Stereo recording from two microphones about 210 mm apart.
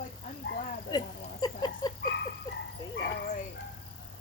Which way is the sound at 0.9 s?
20° left (ahead or behind).